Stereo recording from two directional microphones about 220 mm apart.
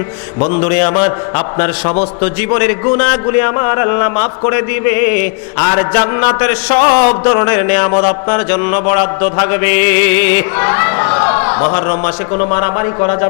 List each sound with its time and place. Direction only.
0.3 s a man's voice: 30° left (ahead or behind)
1.4 s mantra: 15° left (ahead or behind)
12.4 s a man's voice: 20° left (ahead or behind)